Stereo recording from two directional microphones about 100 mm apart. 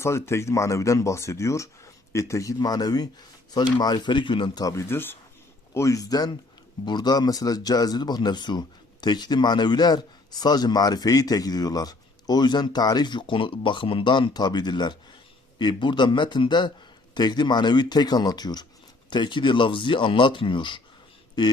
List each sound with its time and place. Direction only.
0.0 s speech: 25° left (ahead or behind); by 4.6 s 55° left (ahead or behind)
4.6 s speech: 30° left (ahead or behind); by 21.5 s 45° left (ahead or behind)